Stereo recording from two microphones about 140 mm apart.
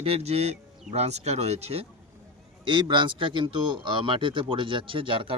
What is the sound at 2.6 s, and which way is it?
A man's voice, 35° right (ahead or behind).